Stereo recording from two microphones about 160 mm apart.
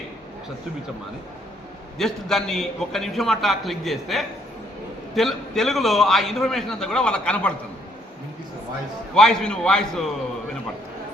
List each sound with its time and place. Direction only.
2.0 s a man's voice: centre (ahead or behind)
9.1 s a man's voice: 5° left (ahead or behind)